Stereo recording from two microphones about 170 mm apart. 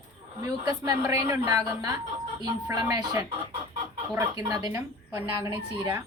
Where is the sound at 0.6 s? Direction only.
20° right (ahead or behind).